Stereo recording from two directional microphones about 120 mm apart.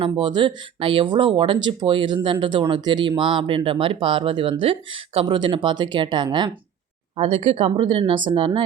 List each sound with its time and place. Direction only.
0.2 s speech: 40° right (ahead or behind)
7.2 s speech: 55° right (ahead or behind)